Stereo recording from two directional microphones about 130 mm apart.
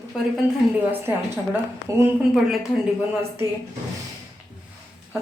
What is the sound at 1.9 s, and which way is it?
Speech, 25° right (ahead or behind).